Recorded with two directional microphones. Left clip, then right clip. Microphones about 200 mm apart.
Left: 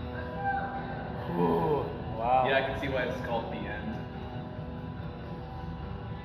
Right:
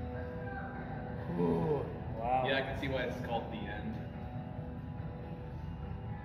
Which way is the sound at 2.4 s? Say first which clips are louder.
Left 6 dB; 50° right (ahead or behind).